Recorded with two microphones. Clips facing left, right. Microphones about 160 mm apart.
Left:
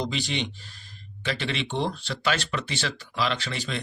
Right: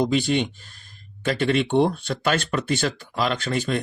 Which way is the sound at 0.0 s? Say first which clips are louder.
Right 8 dB; 50° right (ahead or behind).